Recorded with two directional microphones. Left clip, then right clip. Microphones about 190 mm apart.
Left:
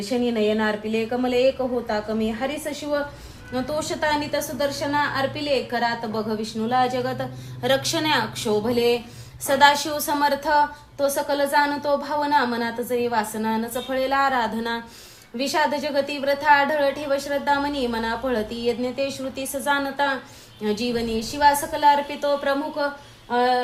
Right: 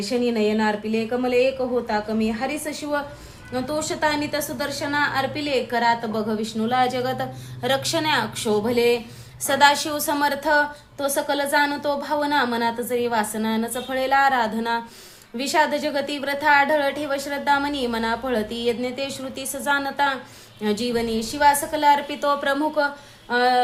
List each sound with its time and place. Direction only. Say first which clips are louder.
0.1 s a woman's voice: even; 5° right (ahead or behind)
7.6 s a woman's voice: even; 5° right (ahead or behind); by 22.9 s 25° right (ahead or behind)
23.3 s a sound: right 2 dB; 20° right (ahead or behind)